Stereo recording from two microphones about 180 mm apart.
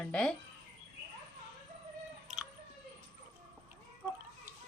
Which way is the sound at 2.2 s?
Centre (ahead or behind).